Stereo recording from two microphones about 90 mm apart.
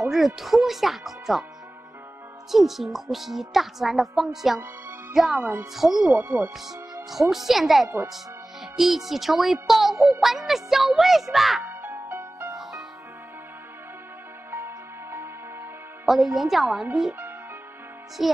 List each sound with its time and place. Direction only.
0.1 s speech: centre (ahead or behind)
2.5 s speech: centre (ahead or behind)
5.4 s speech: 20° right (ahead or behind)
5.8 s speech: 5° right (ahead or behind)
6.1 s speech: 20° right (ahead or behind)
7.1 s speech: 5° right (ahead or behind)
11.6 s music: 25° right (ahead or behind)
14.5 s music: 25° right (ahead or behind)
16.1 s speech: 5° right (ahead or behind)
18.2 s speech: 5° right (ahead or behind)